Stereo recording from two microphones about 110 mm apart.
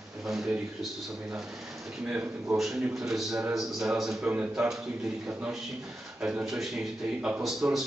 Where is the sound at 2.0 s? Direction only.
10° right (ahead or behind).